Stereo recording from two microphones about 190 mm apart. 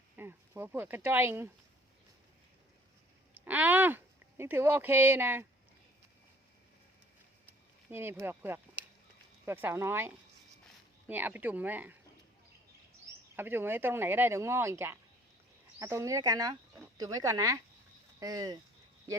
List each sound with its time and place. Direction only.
0.2 s speech: 10° right (ahead or behind)
3.3 s speech: 10° right (ahead or behind)
7.9 s speech: 10° right (ahead or behind)
11.1 s speech: 10° right (ahead or behind)
13.3 s speech: 10° right (ahead or behind)